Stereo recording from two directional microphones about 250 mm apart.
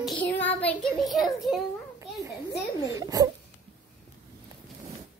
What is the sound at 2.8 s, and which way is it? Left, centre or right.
Speech, centre.